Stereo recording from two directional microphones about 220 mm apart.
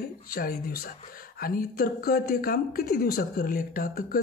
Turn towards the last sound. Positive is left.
turn(degrees=40)  # may be behind; listen again after turning